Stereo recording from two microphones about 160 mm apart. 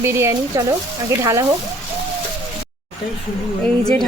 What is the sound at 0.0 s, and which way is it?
Speech, 15° right (ahead or behind).